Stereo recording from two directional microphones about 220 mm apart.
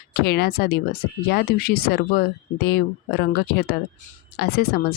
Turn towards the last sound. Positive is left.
turn(degrees=45)  # may be behind; listen again after turning